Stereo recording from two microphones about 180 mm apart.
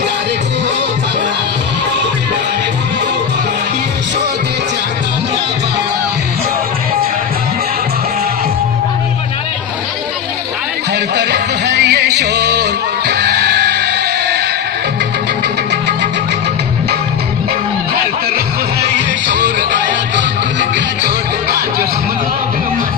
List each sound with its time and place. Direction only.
10.9 s music: 70° right (ahead or behind)
20.1 s music: 80° right